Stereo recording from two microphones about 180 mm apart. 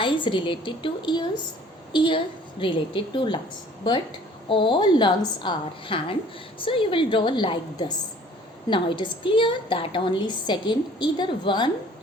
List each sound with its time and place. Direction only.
0.0 s a woman's voice: 30° left (ahead or behind)
4.4 s a woman's voice: 25° left (ahead or behind)